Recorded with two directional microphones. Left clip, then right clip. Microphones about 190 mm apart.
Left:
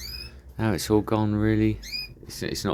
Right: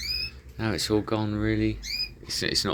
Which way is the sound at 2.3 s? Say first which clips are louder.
Right 4 dB; 15° left (ahead or behind).